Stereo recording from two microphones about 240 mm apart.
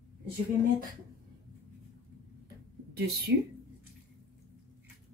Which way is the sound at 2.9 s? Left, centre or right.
Right.